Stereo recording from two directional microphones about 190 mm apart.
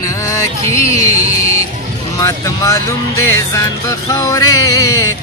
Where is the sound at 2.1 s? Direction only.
15° left (ahead or behind).